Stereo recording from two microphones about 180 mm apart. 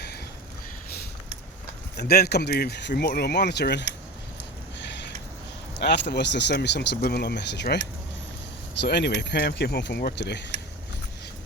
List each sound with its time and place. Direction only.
2.0 s speech: 60° left (ahead or behind)
5.8 s speech: 65° left (ahead or behind)
8.8 s speech: 70° left (ahead or behind)